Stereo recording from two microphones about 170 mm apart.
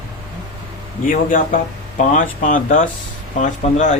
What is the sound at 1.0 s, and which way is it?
Speech, 50° left (ahead or behind).